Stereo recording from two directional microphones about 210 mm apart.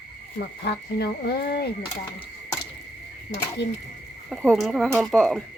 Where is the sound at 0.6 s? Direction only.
50° left (ahead or behind).